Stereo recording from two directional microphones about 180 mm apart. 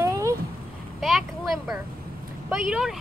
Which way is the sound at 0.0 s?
15° right (ahead or behind).